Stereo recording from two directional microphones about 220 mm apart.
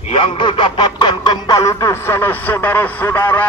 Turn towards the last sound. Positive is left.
turn(degrees=10)  # may be behind; listen again after turning